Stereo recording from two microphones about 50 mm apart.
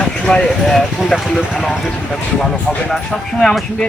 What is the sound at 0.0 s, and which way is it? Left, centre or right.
Clip-clop, centre.